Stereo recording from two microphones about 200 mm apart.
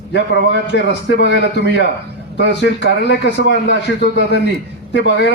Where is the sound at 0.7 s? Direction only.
60° left (ahead or behind).